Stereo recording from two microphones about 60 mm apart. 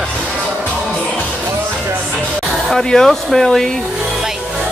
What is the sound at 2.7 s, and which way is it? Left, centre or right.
Speech, centre.